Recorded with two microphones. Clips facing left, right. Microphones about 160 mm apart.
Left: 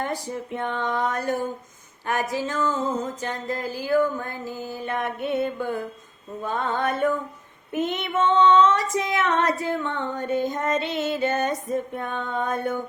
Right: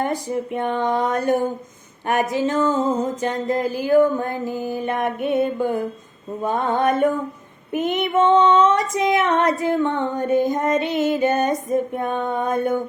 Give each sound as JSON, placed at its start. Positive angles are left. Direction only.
{"t": 0.0, "sound": "music", "side_deg": -15}
{"t": 4.7, "sound": "female singing", "side_deg": -15}